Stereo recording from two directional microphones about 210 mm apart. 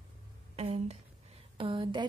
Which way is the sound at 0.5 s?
30° right (ahead or behind).